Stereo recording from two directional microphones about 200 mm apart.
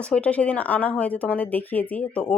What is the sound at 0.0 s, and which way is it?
Speech, 5° left (ahead or behind).